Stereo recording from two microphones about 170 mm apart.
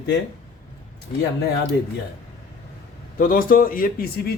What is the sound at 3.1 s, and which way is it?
A man's voice, 55° left (ahead or behind).